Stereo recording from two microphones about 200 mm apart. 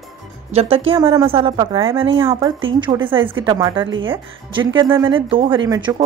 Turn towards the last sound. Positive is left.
turn(degrees=-20)  # may be behind; listen again after turning